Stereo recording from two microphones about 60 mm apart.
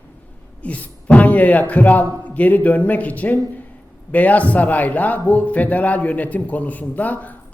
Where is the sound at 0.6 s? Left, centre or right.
Left.